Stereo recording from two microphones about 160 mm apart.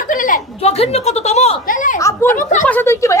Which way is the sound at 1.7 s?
55° left (ahead or behind).